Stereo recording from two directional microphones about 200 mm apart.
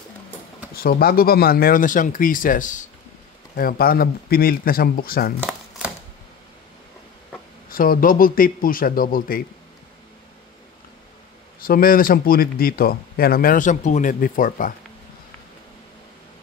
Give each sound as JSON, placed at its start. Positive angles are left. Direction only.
{"t": 0.8, "sound": "speech", "side_deg": 50}
{"t": 7.7, "sound": "speech", "side_deg": 45}
{"t": 11.6, "sound": "speech", "side_deg": 45}